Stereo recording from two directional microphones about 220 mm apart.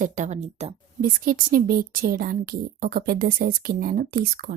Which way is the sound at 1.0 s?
40° right (ahead or behind).